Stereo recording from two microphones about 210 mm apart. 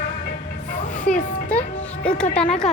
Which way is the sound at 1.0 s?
5° left (ahead or behind).